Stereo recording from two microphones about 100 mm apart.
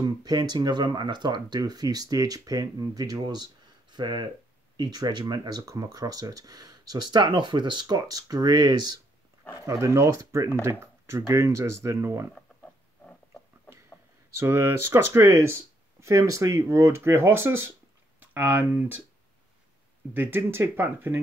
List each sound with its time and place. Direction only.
0.2 s speech: 45° right (ahead or behind)
9.7 s speech: 30° right (ahead or behind)
14.4 s speech: 30° right (ahead or behind)
20.2 s speech: 20° right (ahead or behind)